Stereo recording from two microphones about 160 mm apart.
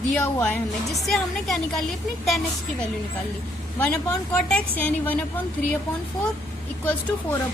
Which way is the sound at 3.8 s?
10° left (ahead or behind).